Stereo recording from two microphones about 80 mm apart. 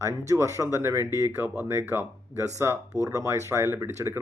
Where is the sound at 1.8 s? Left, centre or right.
Right.